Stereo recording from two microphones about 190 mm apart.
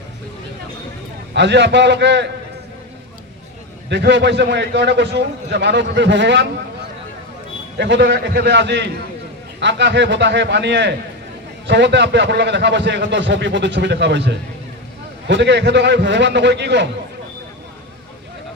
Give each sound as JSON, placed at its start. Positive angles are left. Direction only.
{"t": 1.3, "sound": "a man's voice", "side_deg": -65}
{"t": 3.8, "sound": "a man's voice", "side_deg": -65}
{"t": 7.8, "sound": "a man's voice", "side_deg": -65}